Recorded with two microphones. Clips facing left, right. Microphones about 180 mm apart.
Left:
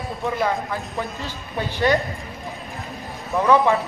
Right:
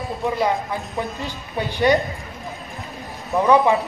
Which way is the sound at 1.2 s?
15° right (ahead or behind).